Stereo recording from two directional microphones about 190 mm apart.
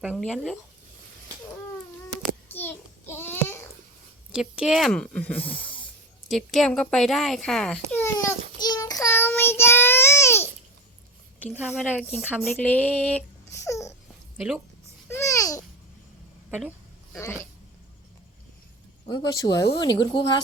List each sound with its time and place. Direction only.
0.0 s speech: 5° left (ahead or behind)
2.5 s a sound: 10° left (ahead or behind)
4.3 s speech: 5° right (ahead or behind)
6.2 s baby cry: centre (ahead or behind)
11.6 s speech: 5° right (ahead or behind)
12.5 s speech: 5° left (ahead or behind)
14.3 s speech: 5° right (ahead or behind)
15.1 s babbling: 15° left (ahead or behind)
16.5 s speech: 10° right (ahead or behind)
17.1 s speech: 15° left (ahead or behind)
19.0 s speech: 20° left (ahead or behind)